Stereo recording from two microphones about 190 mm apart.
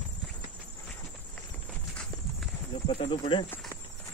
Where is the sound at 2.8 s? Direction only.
25° left (ahead or behind).